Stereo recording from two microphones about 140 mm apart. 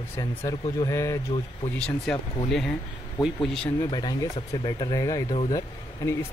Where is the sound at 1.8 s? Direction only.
5° left (ahead or behind).